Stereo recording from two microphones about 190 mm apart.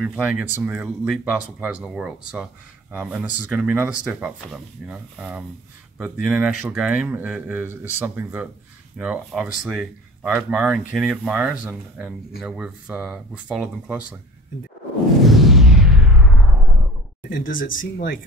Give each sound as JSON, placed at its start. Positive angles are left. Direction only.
{"t": 0.0, "sound": "speech", "side_deg": -5}
{"t": 15.2, "sound": "a sound", "side_deg": 0}
{"t": 17.5, "sound": "speech", "side_deg": 45}